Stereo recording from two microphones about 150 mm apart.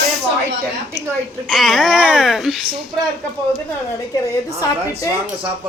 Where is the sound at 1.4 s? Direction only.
Centre (ahead or behind).